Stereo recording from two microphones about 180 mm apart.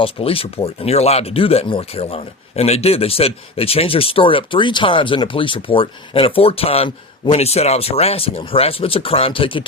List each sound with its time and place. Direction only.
0.0 s speech: 30° left (ahead or behind)